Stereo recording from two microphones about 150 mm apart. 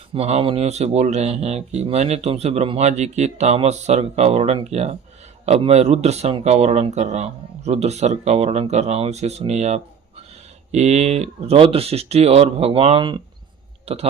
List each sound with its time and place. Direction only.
0.1 s speech: 45° right (ahead or behind)